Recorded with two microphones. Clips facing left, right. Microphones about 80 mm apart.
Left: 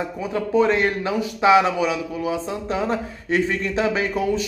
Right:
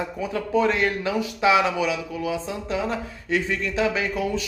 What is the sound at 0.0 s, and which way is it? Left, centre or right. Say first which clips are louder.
A man's voice: left 2 dB; left.